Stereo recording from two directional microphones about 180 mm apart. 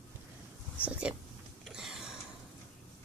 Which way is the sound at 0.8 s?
5° right (ahead or behind).